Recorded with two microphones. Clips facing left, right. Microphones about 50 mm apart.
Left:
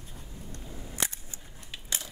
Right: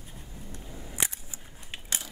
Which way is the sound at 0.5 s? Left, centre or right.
Centre.